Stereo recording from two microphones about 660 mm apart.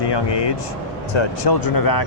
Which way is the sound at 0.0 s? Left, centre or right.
Left.